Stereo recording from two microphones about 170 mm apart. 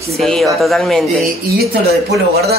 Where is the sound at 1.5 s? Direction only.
65° right (ahead or behind).